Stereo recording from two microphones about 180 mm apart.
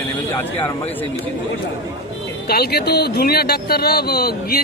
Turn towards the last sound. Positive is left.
turn(degrees=60)  # may be behind; listen again after turning